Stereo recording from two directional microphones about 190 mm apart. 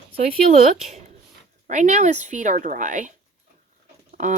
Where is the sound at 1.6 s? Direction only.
40° right (ahead or behind).